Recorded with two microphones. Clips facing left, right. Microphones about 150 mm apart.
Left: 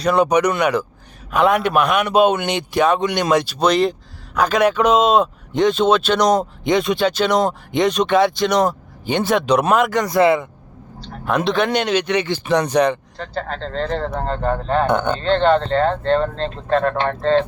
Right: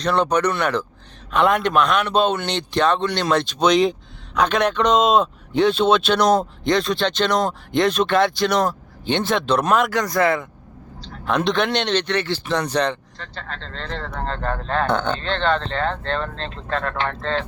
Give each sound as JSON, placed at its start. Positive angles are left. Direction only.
{"t": 0.0, "sound": "a man's voice", "side_deg": 10}
{"t": 5.5, "sound": "a man's voice", "side_deg": 10}
{"t": 7.9, "sound": "a man's voice", "side_deg": 10}
{"t": 8.4, "sound": "speech", "side_deg": 0}
{"t": 10.1, "sound": "speech", "side_deg": 20}
{"t": 11.3, "sound": "a man's voice", "side_deg": 5}
{"t": 13.2, "sound": "speech", "side_deg": 40}
{"t": 14.2, "sound": "a man's voice", "side_deg": 10}
{"t": 15.2, "sound": "speech", "side_deg": 40}